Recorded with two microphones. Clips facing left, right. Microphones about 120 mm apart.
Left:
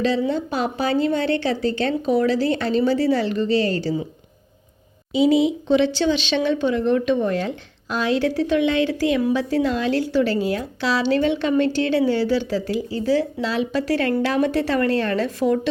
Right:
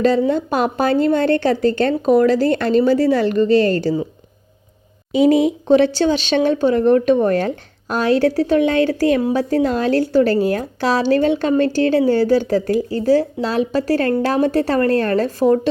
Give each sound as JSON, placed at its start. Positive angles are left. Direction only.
{"t": 0.0, "sound": "a woman's voice", "side_deg": -50}
{"t": 5.1, "sound": "a woman's voice", "side_deg": -50}